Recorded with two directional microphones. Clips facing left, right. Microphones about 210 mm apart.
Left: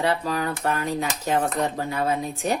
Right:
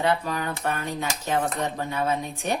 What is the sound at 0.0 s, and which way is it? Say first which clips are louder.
A woman's voice: left 1 dB; 35° left (ahead or behind).